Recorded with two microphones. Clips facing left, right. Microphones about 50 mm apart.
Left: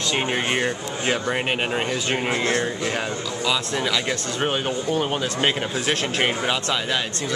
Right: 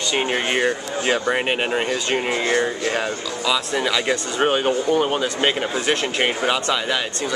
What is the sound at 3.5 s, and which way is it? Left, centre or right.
A man's voice, centre.